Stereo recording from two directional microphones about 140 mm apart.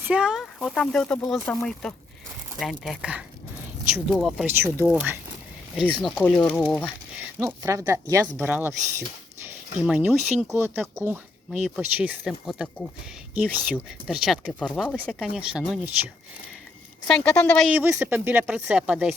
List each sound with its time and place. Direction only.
0.0 s speech: 5° right (ahead or behind)
4.8 s speech: 15° right (ahead or behind)
6.0 s speech: 5° left (ahead or behind)
6.7 s a sound: 5° right (ahead or behind)
7.3 s speech: 20° right (ahead or behind)
8.4 s speech: 10° right (ahead or behind); by 14.9 s 5° left (ahead or behind)
15.4 s speech: 5° right (ahead or behind)
17.1 s speech: 5° left (ahead or behind)
17.7 s speech: 5° right (ahead or behind)